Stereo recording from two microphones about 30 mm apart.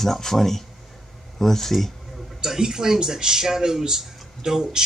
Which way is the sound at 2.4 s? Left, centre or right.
Centre.